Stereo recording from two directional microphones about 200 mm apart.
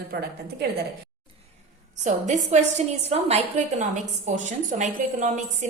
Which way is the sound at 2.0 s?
35° right (ahead or behind).